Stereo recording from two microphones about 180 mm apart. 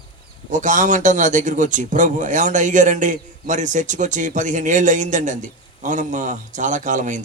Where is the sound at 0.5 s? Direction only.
45° right (ahead or behind).